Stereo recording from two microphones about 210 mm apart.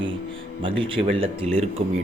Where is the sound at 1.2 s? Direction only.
30° right (ahead or behind).